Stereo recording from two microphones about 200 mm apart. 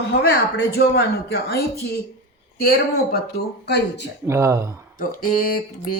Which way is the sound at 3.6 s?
55° left (ahead or behind).